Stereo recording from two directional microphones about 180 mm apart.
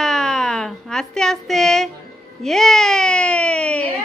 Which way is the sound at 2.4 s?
Centre (ahead or behind).